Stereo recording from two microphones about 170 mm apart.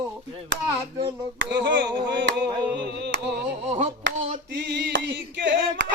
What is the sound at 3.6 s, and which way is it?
Clapping, 40° right (ahead or behind).